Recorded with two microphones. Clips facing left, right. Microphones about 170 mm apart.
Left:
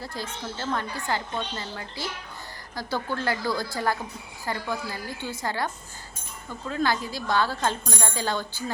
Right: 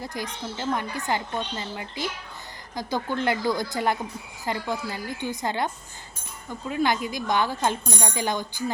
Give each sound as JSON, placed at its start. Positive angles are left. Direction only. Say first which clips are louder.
{"t": 0.0, "sound": "a woman's voice", "louder": "right 2 dB", "side_deg": -15}